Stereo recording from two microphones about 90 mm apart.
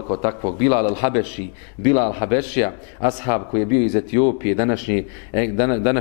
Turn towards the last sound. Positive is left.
turn(degrees=15)  # may be behind; listen again after turning